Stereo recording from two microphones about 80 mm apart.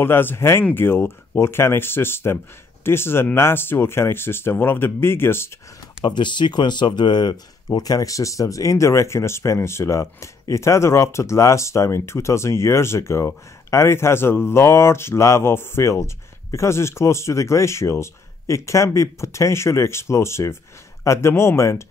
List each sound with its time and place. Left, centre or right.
0.0 s speech: left
6.0 s speech: left